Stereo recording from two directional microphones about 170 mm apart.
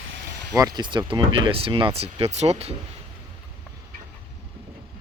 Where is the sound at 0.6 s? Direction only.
25° right (ahead or behind); by 2.7 s 40° right (ahead or behind).